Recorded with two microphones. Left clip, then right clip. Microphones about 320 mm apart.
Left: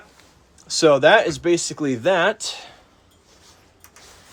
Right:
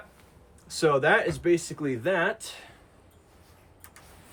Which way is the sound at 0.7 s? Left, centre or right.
Centre.